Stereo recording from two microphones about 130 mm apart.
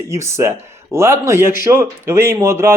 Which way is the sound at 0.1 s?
20° right (ahead or behind).